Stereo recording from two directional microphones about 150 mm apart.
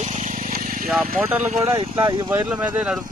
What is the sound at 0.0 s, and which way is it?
Vehicle, 50° right (ahead or behind).